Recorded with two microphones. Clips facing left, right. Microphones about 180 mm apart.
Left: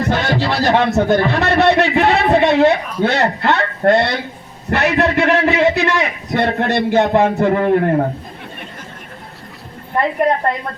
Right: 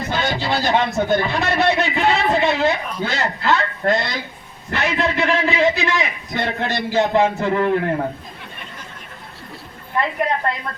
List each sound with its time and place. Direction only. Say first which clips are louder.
0.0 s a man's voice: left 5 dB; 65° left (ahead or behind); by 8.0 s 50° left (ahead or behind)
10.0 s a woman's voice: left 5 dB; 50° left (ahead or behind)